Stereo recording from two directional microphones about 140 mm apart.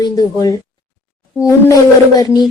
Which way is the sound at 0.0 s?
25° left (ahead or behind).